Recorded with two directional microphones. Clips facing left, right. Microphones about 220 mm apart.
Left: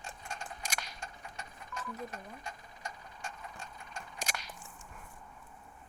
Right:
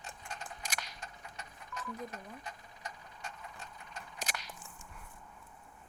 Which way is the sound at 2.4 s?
45° left (ahead or behind).